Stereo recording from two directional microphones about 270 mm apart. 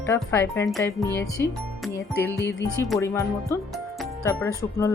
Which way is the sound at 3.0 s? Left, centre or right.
Centre.